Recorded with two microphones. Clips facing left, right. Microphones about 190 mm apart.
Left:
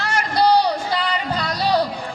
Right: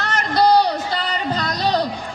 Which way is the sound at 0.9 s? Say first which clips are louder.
Even; 10° left (ahead or behind).